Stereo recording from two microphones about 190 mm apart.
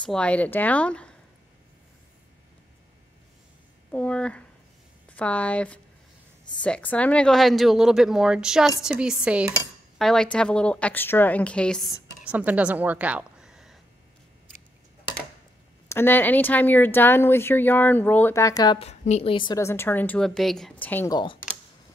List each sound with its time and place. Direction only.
0.0 s a woman's voice: 5° left (ahead or behind)
3.9 s a woman's voice: 5° left (ahead or behind)
12.3 s a woman's voice: 5° right (ahead or behind)
15.9 s a woman's voice: 10° left (ahead or behind)
18.8 s a woman's voice: 35° left (ahead or behind); by 21.1 s 10° left (ahead or behind)
21.1 s speech: 25° left (ahead or behind)